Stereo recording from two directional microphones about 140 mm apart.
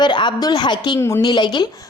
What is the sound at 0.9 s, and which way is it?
Speech, 20° left (ahead or behind).